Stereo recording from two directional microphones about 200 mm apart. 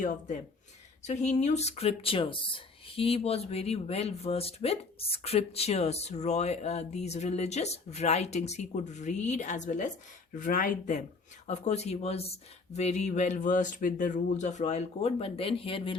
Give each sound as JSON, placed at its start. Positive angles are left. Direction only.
{"t": 1.0, "sound": "speech", "side_deg": 35}